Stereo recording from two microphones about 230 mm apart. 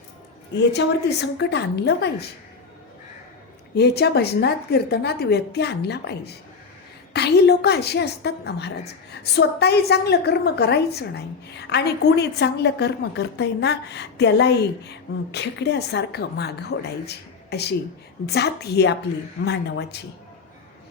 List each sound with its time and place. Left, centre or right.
1.2 s a woman's voice: left
3.8 s a woman's voice: left